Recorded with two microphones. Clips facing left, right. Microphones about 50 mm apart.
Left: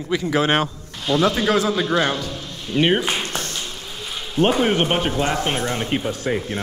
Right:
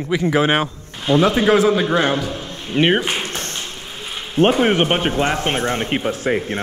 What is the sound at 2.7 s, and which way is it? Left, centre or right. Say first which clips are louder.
Speech: right 2 dB; right.